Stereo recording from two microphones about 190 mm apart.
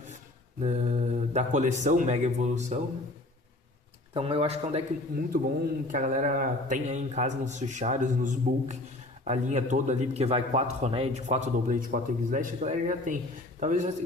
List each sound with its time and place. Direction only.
0.6 s a man's voice: 35° right (ahead or behind)
4.1 s a man's voice: 30° right (ahead or behind)
5.3 s a man's voice: 50° right (ahead or behind)